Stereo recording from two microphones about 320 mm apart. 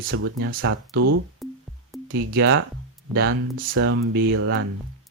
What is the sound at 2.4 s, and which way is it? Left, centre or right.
Speech, right.